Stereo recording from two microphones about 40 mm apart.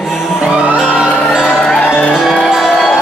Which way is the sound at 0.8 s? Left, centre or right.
Centre.